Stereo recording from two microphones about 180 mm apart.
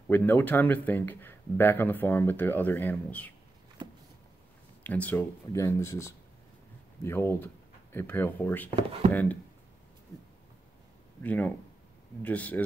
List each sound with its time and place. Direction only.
0.1 s speech: 10° left (ahead or behind)
3.8 s vehicle: 25° right (ahead or behind)
4.8 s speech: 10° left (ahead or behind)
8.7 s speech: 35° right (ahead or behind)
9.1 s speech: 10° left (ahead or behind)
11.2 s speech: 10° left (ahead or behind)